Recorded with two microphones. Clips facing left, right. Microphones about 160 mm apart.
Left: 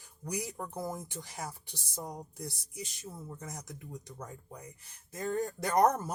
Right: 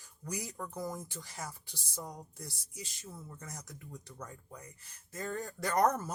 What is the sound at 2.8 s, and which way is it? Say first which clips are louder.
Speech: left 4 dB; 15° left (ahead or behind).